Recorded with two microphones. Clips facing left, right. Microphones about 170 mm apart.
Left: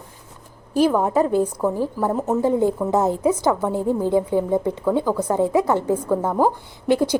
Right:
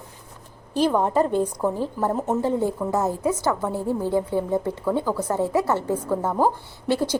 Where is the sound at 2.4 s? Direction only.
15° left (ahead or behind).